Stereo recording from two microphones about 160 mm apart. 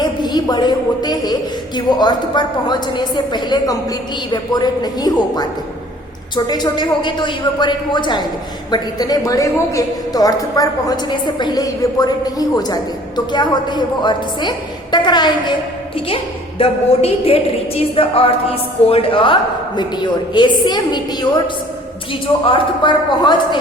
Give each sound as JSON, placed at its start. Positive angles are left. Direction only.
{"t": 0.0, "sound": "a woman's voice", "side_deg": 25}